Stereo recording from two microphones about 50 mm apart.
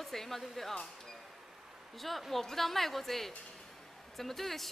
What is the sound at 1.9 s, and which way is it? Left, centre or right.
Speech, centre.